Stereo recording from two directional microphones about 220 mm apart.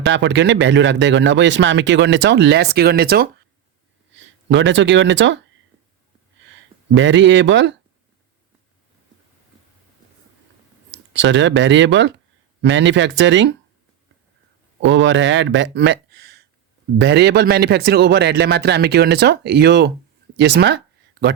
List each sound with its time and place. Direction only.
0.0 s a man's voice: 55° right (ahead or behind)
4.1 s speech: 55° right (ahead or behind)
6.5 s speech: 55° right (ahead or behind)
10.9 s speech: 55° right (ahead or behind)
14.8 s a man's voice: 55° right (ahead or behind)